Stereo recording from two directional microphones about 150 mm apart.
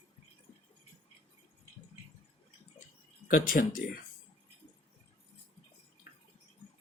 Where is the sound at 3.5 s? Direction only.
70° left (ahead or behind).